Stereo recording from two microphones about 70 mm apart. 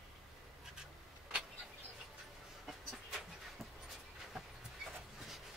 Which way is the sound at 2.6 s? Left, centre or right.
Centre.